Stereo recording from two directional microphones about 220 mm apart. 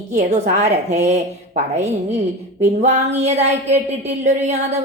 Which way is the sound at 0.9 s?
30° right (ahead or behind).